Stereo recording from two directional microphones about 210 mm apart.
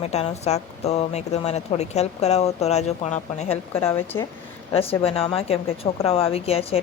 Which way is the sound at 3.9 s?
10° left (ahead or behind).